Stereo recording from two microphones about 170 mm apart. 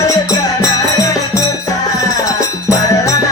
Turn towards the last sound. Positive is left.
turn(degrees=20)  # may be behind; listen again after turning